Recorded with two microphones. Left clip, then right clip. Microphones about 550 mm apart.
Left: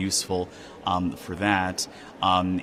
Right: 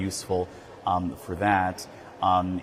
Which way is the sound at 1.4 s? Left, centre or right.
Right.